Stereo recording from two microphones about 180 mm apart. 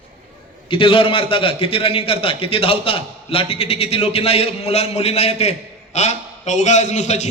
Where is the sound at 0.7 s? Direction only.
30° left (ahead or behind).